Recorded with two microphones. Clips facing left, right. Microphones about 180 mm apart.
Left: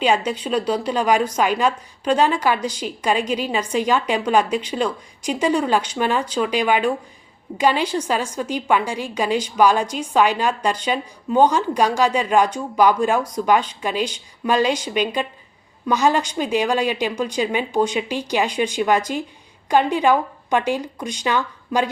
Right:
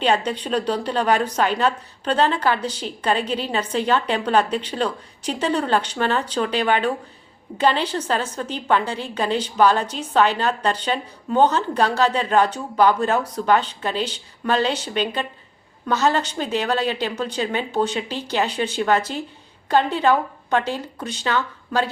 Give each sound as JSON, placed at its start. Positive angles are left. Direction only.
{"t": 0.0, "sound": "a woman's voice", "side_deg": 10}